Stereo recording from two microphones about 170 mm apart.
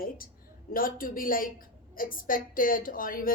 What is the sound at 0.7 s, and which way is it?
A woman's voice, 55° left (ahead or behind).